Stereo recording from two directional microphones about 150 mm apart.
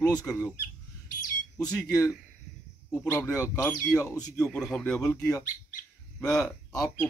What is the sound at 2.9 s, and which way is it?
Speech, 10° left (ahead or behind).